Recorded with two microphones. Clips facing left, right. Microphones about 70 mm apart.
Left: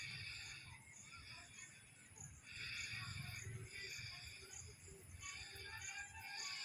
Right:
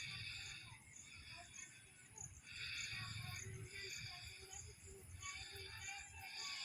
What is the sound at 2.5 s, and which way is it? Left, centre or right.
Roaring cats, centre.